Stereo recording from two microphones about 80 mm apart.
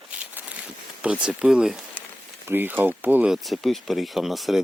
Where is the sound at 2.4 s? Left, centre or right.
Right.